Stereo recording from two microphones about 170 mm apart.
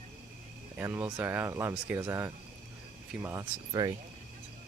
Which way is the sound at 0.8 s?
15° right (ahead or behind).